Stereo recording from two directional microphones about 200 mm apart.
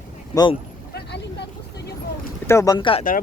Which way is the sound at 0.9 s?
60° left (ahead or behind).